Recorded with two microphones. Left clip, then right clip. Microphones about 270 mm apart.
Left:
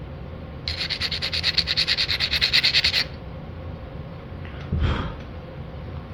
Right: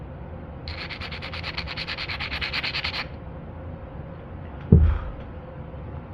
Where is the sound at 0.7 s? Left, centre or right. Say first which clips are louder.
Left 8 dB; left.